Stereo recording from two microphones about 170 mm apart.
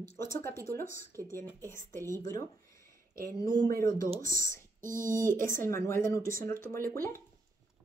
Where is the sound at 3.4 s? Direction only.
20° left (ahead or behind).